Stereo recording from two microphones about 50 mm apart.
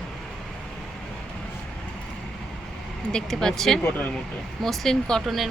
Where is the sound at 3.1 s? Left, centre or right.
Centre.